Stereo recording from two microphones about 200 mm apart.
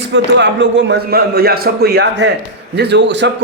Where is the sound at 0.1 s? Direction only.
65° right (ahead or behind).